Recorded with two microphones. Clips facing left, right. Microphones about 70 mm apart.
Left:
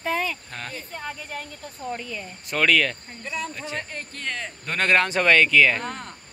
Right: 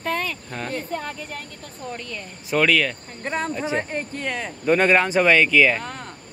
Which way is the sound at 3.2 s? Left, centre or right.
Right.